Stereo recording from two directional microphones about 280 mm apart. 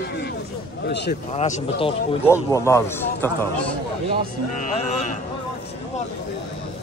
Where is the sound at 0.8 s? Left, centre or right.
Left.